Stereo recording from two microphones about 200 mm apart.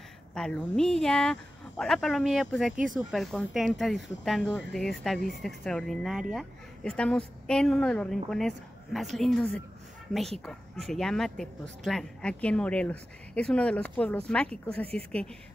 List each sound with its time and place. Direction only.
0.3 s speech: 5° left (ahead or behind)